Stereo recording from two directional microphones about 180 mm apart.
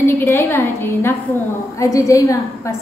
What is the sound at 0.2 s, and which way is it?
A woman's voice, 15° left (ahead or behind).